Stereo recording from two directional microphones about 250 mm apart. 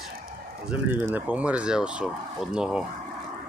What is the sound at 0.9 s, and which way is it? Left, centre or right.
Speech, centre.